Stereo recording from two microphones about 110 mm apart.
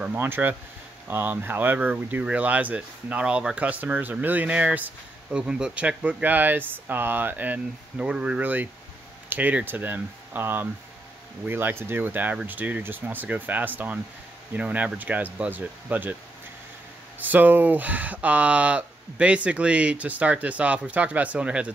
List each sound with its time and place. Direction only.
0.0 s speech: 15° right (ahead or behind)
17.2 s speech: 15° right (ahead or behind)